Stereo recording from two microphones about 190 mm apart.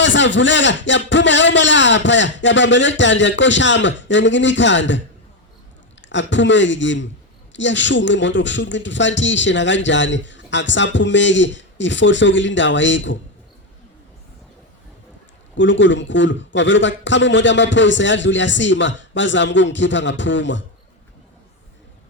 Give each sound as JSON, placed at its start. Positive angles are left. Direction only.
{"t": 0.0, "sound": "a man's voice", "side_deg": 75}
{"t": 15.5, "sound": "a man's voice", "side_deg": 75}